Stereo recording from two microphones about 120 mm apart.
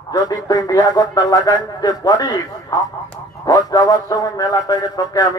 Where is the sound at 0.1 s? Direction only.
30° left (ahead or behind).